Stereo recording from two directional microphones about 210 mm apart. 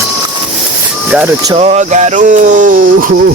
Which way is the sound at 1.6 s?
35° right (ahead or behind).